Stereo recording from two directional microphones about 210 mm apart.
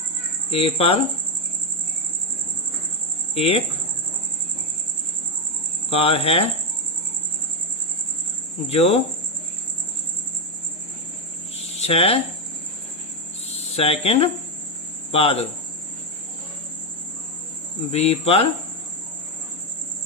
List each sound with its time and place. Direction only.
0.5 s speech: 25° left (ahead or behind)
3.3 s speech: 25° left (ahead or behind)
5.9 s speech: 25° left (ahead or behind)
8.6 s speech: 30° left (ahead or behind)
11.5 s cricket: 30° left (ahead or behind)
13.5 s speech: 30° left (ahead or behind)
17.9 s speech: 30° left (ahead or behind)